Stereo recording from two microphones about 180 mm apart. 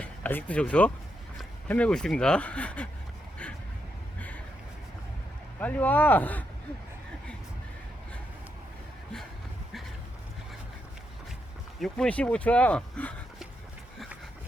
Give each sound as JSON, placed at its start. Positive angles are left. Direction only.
{"t": 0.0, "sound": "speech", "side_deg": 10}
{"t": 5.5, "sound": "speech", "side_deg": 10}
{"t": 11.8, "sound": "speech", "side_deg": 5}